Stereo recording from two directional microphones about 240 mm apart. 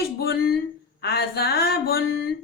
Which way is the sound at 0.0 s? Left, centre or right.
Left.